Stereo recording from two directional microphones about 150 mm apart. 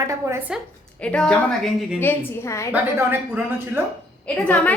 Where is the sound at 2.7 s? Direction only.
15° right (ahead or behind).